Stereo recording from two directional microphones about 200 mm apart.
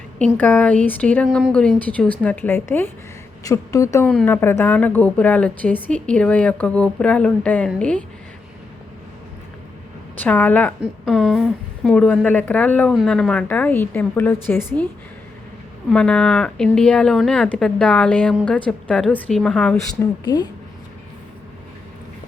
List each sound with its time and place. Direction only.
0.2 s a woman's voice: 10° left (ahead or behind)
10.2 s a woman's voice: 10° left (ahead or behind)
15.9 s speech: 5° left (ahead or behind)
20.0 s a woman's voice: 20° left (ahead or behind)